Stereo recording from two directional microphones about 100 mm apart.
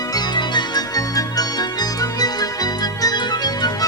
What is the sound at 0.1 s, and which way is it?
Music, 45° left (ahead or behind).